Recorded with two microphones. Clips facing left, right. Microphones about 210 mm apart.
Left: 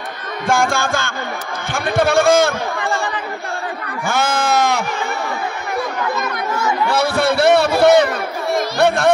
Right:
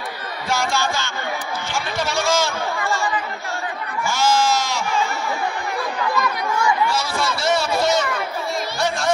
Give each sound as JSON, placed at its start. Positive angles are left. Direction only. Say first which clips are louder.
{"t": 0.5, "sound": "music", "louder": "left 5 dB", "side_deg": 50}
{"t": 1.7, "sound": "a man's voice", "louder": "left 10 dB", "side_deg": 55}
{"t": 4.0, "sound": "bleat", "louder": "even", "side_deg": 55}
{"t": 6.9, "sound": "a sound", "louder": "left 7 dB", "side_deg": 60}